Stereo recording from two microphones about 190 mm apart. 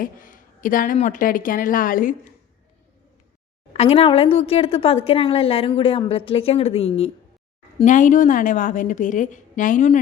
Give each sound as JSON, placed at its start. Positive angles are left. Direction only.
{"t": 0.0, "sound": "a woman's voice", "side_deg": 45}
{"t": 3.7, "sound": "a woman's voice", "side_deg": 35}